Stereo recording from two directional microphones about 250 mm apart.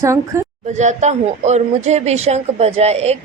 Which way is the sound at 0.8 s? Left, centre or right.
Right.